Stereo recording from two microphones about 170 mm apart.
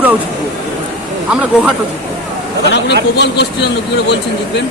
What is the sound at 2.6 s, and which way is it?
A man's voice, 85° left.